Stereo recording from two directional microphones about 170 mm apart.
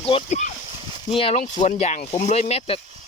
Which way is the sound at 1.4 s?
45° left (ahead or behind).